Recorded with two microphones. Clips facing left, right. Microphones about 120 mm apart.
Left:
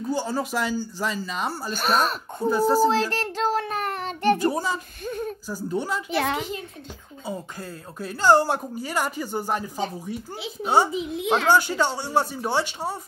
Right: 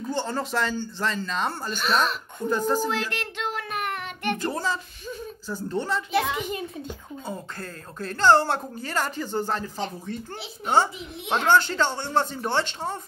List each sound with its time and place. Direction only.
0.1 s a woman's voice: 10° left (ahead or behind)
1.8 s speech: 45° left (ahead or behind)
2.5 s a woman's voice: 10° left (ahead or behind)
2.9 s child singing: 35° left (ahead or behind)
4.4 s a woman's voice: 10° left (ahead or behind)
5.0 s a sound: 55° left (ahead or behind)
5.5 s a woman's voice: 10° left (ahead or behind)
6.1 s a child's voice: 60° left (ahead or behind)
7.2 s a woman's voice: 10° left (ahead or behind)